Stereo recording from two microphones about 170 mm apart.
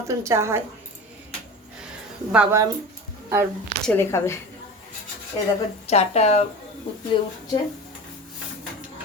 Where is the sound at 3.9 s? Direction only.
15° left (ahead or behind).